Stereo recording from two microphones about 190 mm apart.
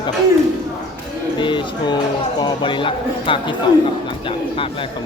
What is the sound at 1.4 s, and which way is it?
Speech, 25° left (ahead or behind).